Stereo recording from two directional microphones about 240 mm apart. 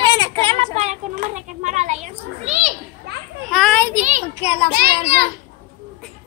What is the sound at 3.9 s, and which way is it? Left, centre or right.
A child's voice, right.